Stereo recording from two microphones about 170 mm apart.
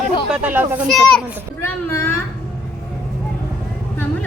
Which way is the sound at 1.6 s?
15° left (ahead or behind).